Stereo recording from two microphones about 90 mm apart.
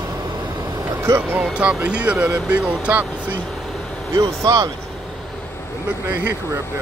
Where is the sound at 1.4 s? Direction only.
10° right (ahead or behind).